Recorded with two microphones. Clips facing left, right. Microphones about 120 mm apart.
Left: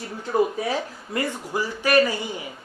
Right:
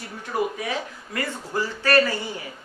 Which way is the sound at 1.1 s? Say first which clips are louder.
Left 2 dB; 15° left (ahead or behind).